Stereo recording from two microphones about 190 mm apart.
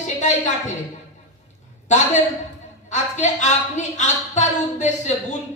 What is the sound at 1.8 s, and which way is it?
A woman's voice, 40° left (ahead or behind).